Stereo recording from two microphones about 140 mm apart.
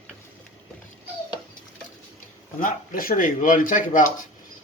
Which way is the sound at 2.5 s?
85° left.